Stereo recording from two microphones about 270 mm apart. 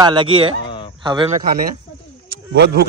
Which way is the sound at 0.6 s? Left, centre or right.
Centre.